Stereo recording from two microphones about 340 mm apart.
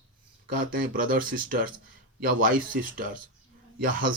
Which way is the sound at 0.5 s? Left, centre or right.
Right.